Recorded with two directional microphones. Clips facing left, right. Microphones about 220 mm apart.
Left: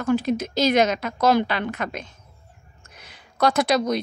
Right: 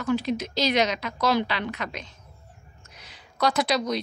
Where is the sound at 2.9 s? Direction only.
55° left (ahead or behind).